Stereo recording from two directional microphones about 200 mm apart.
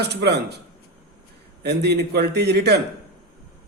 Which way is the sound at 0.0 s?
55° right (ahead or behind).